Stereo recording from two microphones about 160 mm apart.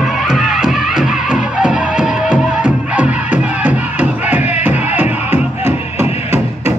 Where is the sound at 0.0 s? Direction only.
5° right (ahead or behind).